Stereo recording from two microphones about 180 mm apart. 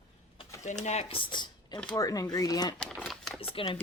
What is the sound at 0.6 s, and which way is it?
Speech, 40° left (ahead or behind).